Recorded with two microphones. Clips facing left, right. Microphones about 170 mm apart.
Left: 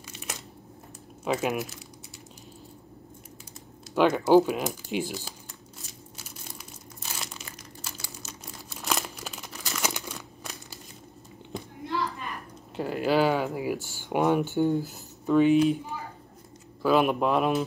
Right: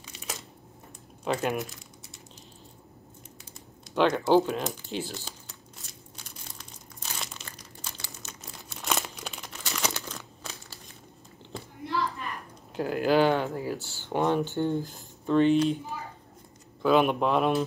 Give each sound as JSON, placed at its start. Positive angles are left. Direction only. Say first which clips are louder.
{"t": 0.0, "sound": "a sound", "louder": "even", "side_deg": 0}
{"t": 1.2, "sound": "speech", "louder": "left 1 dB", "side_deg": 5}
{"t": 3.9, "sound": "speech", "louder": "left 2 dB", "side_deg": 10}
{"t": 5.9, "sound": "crumpling", "louder": "left 3 dB", "side_deg": 5}
{"t": 11.5, "sound": "a sound", "louder": "left 3 dB", "side_deg": 15}
{"t": 12.7, "sound": "speech", "louder": "right 1 dB", "side_deg": 0}
{"t": 16.8, "sound": "speech", "louder": "even", "side_deg": 0}